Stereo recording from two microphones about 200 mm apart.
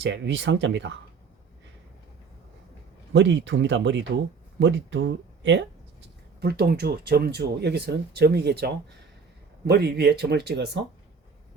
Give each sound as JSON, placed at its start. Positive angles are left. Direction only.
{"t": 0.0, "sound": "speech", "side_deg": -60}
{"t": 3.1, "sound": "speech", "side_deg": -65}
{"t": 6.4, "sound": "speech", "side_deg": -50}